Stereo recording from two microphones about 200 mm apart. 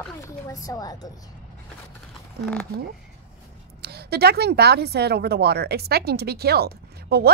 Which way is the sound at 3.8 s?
55° right (ahead or behind).